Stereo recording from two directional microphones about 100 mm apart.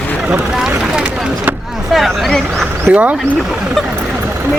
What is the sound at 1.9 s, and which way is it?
Speech, centre (ahead or behind).